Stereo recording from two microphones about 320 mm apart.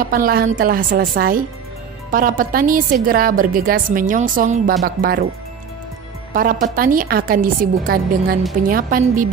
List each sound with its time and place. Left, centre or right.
0.0 s a woman's voice: right
6.3 s a woman's voice: right